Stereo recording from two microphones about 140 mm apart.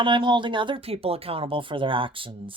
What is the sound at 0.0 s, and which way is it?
Speech, 35° right (ahead or behind).